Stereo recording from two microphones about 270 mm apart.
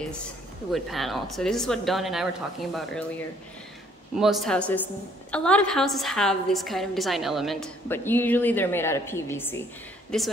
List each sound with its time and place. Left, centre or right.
0.7 s a woman's voice: centre
4.1 s a woman's voice: centre